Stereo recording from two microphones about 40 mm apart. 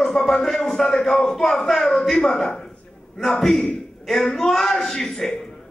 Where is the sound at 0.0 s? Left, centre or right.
Centre.